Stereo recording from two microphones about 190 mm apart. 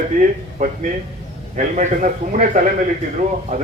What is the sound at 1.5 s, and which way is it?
A man's voice, 40° right (ahead or behind).